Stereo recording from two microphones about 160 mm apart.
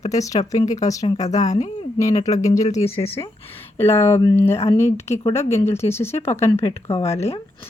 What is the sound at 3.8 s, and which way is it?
Speech, 15° left (ahead or behind).